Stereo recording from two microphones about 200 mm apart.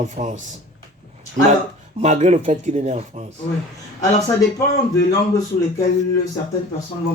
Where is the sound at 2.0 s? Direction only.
35° right (ahead or behind).